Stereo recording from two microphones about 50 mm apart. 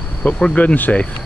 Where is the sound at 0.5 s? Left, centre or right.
Left.